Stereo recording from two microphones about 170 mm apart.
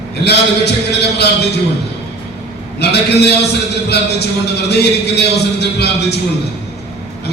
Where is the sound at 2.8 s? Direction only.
75° left (ahead or behind).